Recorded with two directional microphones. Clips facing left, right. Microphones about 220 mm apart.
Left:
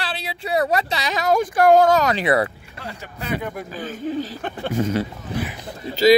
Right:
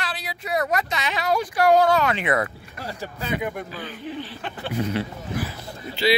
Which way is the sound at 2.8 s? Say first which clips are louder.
Right 2 dB; 35° right (ahead or behind).